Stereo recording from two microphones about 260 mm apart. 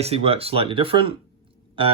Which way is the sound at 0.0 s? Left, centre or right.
Right.